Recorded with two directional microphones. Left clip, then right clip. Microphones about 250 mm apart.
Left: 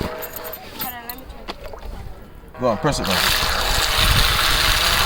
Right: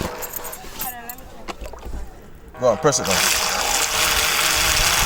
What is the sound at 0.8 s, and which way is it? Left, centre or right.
Keys jangling, left.